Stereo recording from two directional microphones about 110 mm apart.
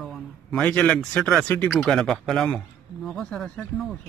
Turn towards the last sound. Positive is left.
turn(degrees=0)  # may be behind; listen again after turning